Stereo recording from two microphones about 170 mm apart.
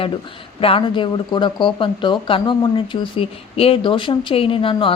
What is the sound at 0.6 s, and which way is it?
Speech, 30° left (ahead or behind).